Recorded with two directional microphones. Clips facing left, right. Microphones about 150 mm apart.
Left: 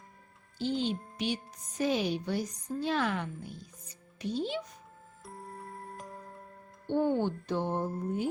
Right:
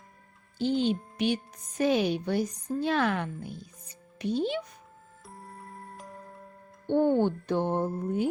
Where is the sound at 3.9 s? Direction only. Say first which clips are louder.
Right 5 dB; 60° right (ahead or behind).